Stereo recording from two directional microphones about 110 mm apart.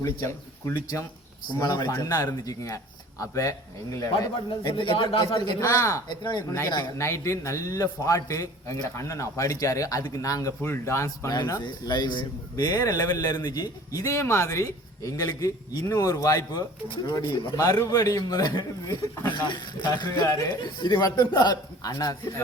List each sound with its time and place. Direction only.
0.0 s a man's voice: 25° left (ahead or behind)
0.7 s a man's voice: 35° left (ahead or behind)
4.4 s speech: 50° left (ahead or behind)
5.5 s a man's voice: 30° left (ahead or behind)
6.1 s a man's voice: 40° left (ahead or behind)
7.0 s a man's voice: 25° left (ahead or behind)
11.3 s a man's voice: 35° left (ahead or behind)